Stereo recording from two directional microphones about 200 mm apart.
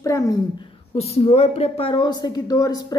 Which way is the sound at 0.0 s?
15° left (ahead or behind).